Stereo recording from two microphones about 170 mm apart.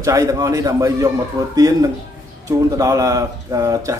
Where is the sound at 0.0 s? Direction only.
20° right (ahead or behind).